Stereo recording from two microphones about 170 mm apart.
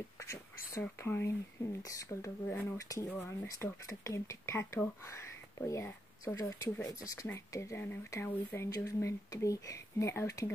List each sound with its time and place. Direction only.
0.7 s speech: 15° left (ahead or behind)